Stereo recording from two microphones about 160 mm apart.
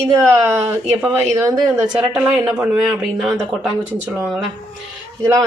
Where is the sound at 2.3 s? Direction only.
10° right (ahead or behind).